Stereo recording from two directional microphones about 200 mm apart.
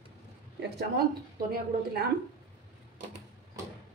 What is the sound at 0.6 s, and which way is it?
Speech, 55° right (ahead or behind).